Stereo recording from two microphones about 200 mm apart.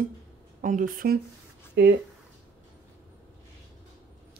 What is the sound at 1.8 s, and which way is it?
Speech, 55° right (ahead or behind).